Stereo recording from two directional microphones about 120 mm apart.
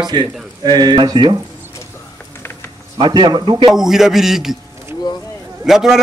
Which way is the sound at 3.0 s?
35° right (ahead or behind).